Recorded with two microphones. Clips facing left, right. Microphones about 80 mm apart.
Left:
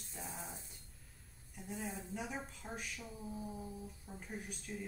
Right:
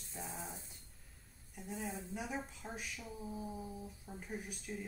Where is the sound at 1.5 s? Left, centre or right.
Centre.